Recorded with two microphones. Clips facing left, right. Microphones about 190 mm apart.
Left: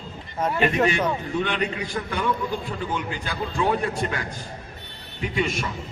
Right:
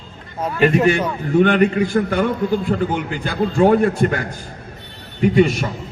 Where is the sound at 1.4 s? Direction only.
55° right (ahead or behind).